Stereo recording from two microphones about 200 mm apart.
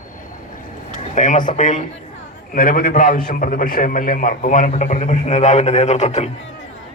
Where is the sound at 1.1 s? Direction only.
40° left (ahead or behind).